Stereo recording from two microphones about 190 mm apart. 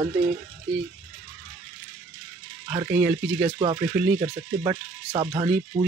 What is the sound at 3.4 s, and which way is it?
Speech, 25° right (ahead or behind).